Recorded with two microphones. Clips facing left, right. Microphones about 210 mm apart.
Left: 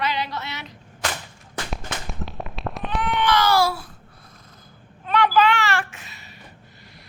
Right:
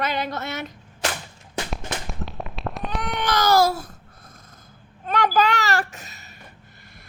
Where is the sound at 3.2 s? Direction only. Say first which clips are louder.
Right 1 dB; 40° right (ahead or behind).